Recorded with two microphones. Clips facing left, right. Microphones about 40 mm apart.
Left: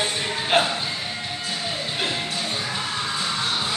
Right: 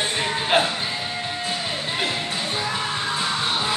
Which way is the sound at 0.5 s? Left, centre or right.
Centre.